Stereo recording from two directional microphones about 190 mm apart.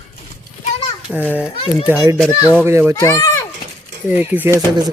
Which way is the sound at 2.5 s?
10° right (ahead or behind).